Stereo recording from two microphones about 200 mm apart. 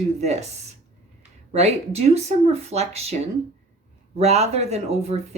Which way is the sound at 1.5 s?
35° right (ahead or behind).